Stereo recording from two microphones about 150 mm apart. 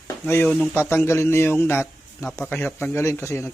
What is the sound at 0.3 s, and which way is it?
A man's voice, 10° left (ahead or behind).